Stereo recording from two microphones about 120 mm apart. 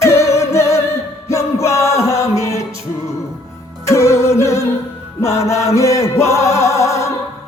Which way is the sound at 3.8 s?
25° left (ahead or behind).